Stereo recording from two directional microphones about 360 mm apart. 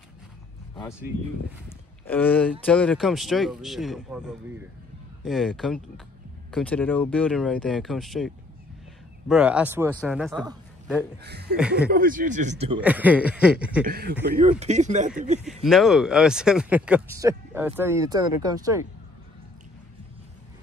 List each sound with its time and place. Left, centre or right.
1.7 s speech: centre
9.3 s a man's voice: centre
11.2 s speech: right
11.5 s speech: centre
11.9 s speech: right
12.8 s speech: centre
13.8 s speech: right
15.4 s speech: centre